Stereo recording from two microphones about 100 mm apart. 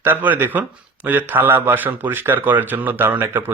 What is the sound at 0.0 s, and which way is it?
A man's voice, 20° right (ahead or behind).